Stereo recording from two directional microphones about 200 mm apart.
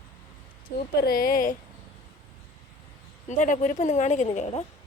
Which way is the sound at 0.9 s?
50° left (ahead or behind).